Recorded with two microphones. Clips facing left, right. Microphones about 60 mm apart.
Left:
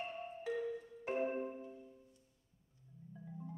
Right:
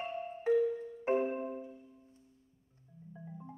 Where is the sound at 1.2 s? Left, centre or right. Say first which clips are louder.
Right 3 dB; centre.